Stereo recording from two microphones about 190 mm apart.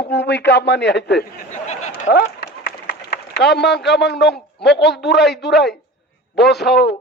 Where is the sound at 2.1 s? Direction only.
55° left (ahead or behind).